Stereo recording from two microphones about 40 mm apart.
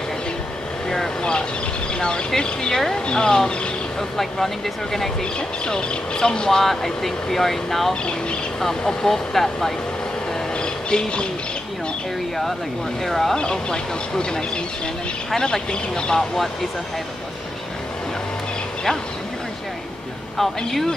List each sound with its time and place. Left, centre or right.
0.8 s vehicle: centre
2.0 s speech: left
5.7 s speech: left
6.6 s speech: centre
7.9 s speech: left
8.6 s speech: centre
10.6 s squawk: left
13.0 s speech: centre
13.4 s speech: left
20.3 s a man's voice: centre